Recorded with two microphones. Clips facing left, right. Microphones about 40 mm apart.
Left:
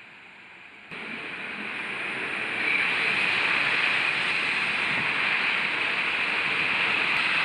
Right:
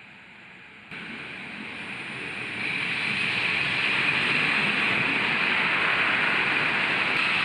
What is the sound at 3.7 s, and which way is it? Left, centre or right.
Vehicle, centre.